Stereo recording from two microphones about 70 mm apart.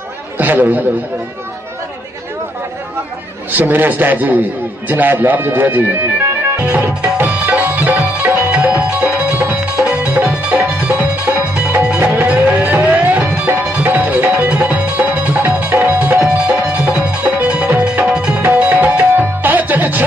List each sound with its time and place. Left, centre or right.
0.4 s a man's voice: right
3.5 s a man's voice: right
7.0 s music: right
16.2 s music: centre